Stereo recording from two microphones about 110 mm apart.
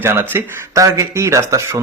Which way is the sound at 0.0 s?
20° right (ahead or behind).